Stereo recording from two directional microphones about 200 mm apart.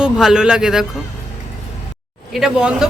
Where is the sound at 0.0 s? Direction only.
5° right (ahead or behind).